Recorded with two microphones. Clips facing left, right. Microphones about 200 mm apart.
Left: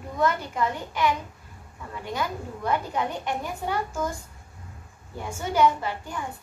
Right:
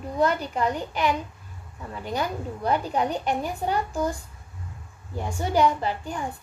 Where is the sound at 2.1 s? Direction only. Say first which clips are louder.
Right 3 dB; 35° right (ahead or behind).